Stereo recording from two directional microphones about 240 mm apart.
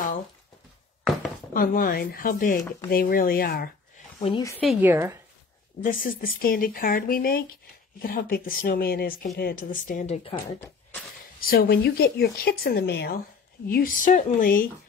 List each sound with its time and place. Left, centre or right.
1.5 s speech: left
4.2 s a woman's voice: centre
4.6 s a woman's voice: centre
5.8 s speech: left